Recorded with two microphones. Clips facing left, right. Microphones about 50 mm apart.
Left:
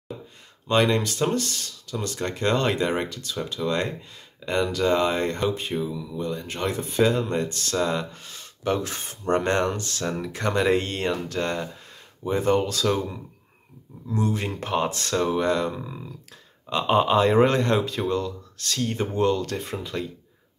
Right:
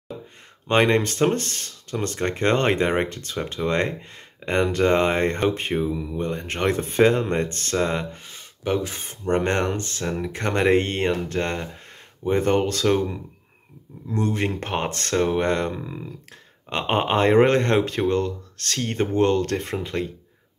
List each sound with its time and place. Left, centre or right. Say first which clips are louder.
0.7 s speech: right 2 dB; right
7.7 s speech: right 1 dB; right
9.3 s speech: even; right
10.0 s speech: right 1 dB; centre
10.3 s speech: right 2 dB; right
14.1 s speech: right 2 dB; right